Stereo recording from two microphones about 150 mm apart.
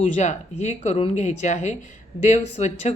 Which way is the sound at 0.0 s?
50° left (ahead or behind).